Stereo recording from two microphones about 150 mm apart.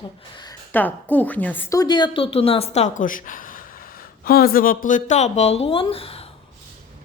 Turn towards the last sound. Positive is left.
turn(degrees=40)  # may be behind; listen again after turning